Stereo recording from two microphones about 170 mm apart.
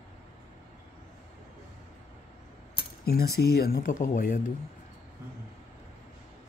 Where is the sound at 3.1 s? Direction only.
65° left (ahead or behind); by 4.4 s 50° left (ahead or behind).